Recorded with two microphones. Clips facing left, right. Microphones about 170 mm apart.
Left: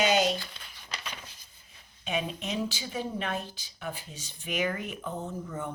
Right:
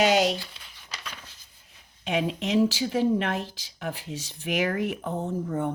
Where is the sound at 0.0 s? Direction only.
75° right (ahead or behind).